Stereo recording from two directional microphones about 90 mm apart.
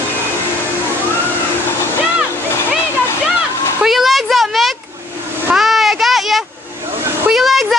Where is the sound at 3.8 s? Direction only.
Centre (ahead or behind).